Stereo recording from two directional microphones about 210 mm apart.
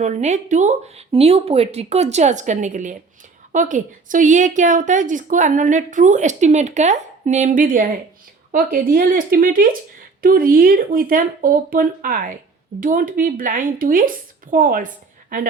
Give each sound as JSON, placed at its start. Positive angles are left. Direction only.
{"t": 0.0, "sound": "a woman's voice", "side_deg": -35}